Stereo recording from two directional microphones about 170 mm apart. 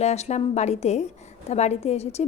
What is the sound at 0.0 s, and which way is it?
Speech, 40° left (ahead or behind).